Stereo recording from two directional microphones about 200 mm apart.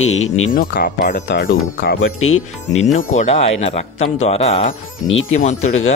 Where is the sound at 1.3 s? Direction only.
70° left (ahead or behind).